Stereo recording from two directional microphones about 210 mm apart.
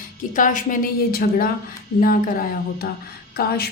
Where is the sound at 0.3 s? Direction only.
40° left (ahead or behind).